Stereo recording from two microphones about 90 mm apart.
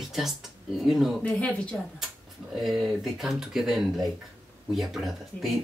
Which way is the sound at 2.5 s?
Centre (ahead or behind).